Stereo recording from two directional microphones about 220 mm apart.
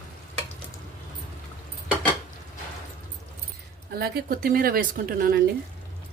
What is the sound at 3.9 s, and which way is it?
A woman's voice, 45° right (ahead or behind).